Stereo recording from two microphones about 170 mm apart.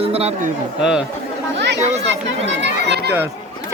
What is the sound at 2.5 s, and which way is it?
Chatter, 80° right.